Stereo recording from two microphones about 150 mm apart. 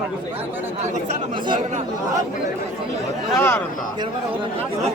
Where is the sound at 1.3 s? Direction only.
30° right (ahead or behind).